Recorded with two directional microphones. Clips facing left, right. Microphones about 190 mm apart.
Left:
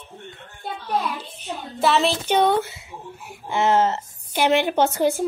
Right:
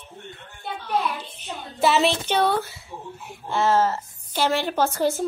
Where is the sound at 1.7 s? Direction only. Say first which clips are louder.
Even; centre (ahead or behind).